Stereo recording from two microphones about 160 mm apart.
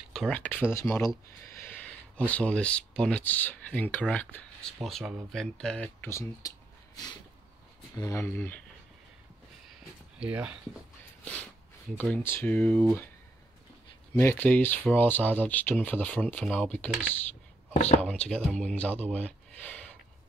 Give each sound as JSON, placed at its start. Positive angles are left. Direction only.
{"t": 0.1, "sound": "speech", "side_deg": 5}
{"t": 6.0, "sound": "speech", "side_deg": 15}
{"t": 7.9, "sound": "speech", "side_deg": 20}
{"t": 10.2, "sound": "speech", "side_deg": -10}
{"t": 12.0, "sound": "speech", "side_deg": 15}
{"t": 14.1, "sound": "speech", "side_deg": 15}
{"t": 17.7, "sound": "speech", "side_deg": 50}
{"t": 18.0, "sound": "speech", "side_deg": 5}
{"t": 19.1, "sound": "a sound", "side_deg": 10}